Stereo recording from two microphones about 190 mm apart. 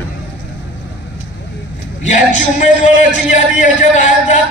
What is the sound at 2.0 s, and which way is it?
A man's voice, 40° left (ahead or behind).